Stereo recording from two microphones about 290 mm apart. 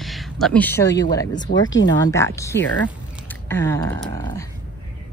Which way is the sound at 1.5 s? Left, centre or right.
Left.